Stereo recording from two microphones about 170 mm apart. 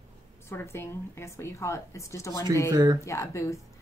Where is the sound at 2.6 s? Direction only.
25° right (ahead or behind).